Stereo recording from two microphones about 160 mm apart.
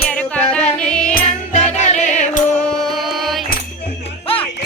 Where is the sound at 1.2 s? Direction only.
50° left (ahead or behind).